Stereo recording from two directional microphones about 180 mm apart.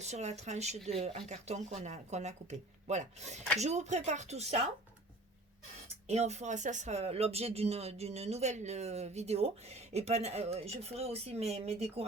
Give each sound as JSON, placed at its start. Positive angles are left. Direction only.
{"t": 0.0, "sound": "speech", "side_deg": -40}
{"t": 6.1, "sound": "speech", "side_deg": -35}